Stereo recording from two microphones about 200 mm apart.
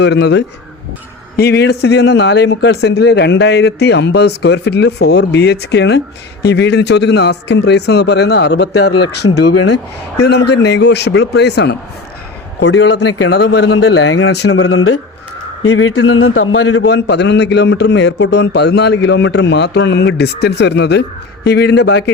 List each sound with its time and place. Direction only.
0.0 s a man's voice: 55° left (ahead or behind); by 8.9 s 75° left (ahead or behind)
9.3 s a man's voice: 60° left (ahead or behind); by 16.9 s 90° left
16.9 s a man's voice: 60° left (ahead or behind)